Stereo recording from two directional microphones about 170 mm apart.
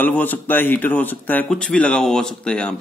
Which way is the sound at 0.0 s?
10° left (ahead or behind).